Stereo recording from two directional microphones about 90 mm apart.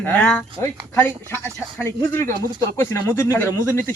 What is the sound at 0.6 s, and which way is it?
Speech, 25° left (ahead or behind).